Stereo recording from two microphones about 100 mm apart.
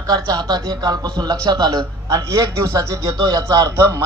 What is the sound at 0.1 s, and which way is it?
A man's voice, 40° right (ahead or behind).